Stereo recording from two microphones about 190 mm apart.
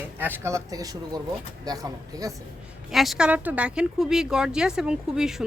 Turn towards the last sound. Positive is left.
turn(degrees=-5)  # may be behind; listen again after turning